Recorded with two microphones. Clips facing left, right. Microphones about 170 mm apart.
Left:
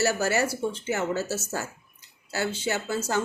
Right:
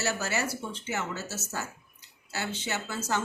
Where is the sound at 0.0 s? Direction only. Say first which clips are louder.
Left 6 dB; 35° left (ahead or behind).